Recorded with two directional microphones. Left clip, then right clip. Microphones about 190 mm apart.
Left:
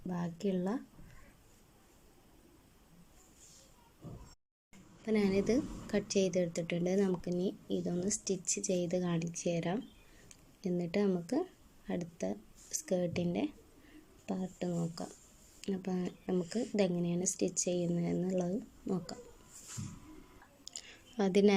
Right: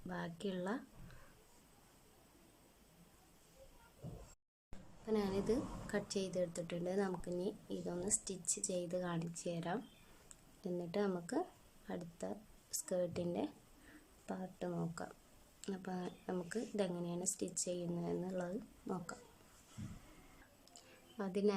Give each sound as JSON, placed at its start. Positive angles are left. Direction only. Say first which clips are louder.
{"t": 0.1, "sound": "speech", "louder": "left 6 dB", "side_deg": 5}
{"t": 5.0, "sound": "a woman's voice", "louder": "left 6 dB", "side_deg": 10}
{"t": 20.7, "sound": "a sound", "louder": "left 13 dB", "side_deg": 20}